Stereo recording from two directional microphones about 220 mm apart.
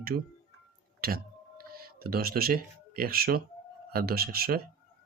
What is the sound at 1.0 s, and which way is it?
Speech, 45° right (ahead or behind).